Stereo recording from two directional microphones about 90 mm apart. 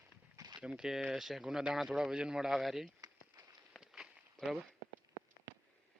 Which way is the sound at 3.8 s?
5° right (ahead or behind).